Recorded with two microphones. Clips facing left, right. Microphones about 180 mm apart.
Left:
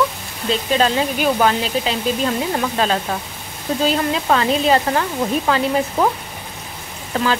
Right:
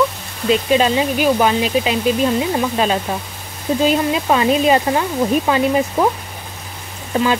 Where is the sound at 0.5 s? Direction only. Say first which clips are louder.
Right 3 dB; 10° right (ahead or behind).